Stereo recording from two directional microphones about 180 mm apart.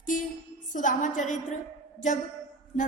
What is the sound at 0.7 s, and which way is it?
Speech, 45° left (ahead or behind).